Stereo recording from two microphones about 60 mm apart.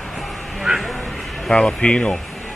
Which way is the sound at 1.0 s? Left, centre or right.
Centre.